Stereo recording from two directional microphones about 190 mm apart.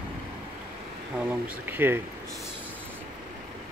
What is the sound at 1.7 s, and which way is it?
Speech, 10° right (ahead or behind).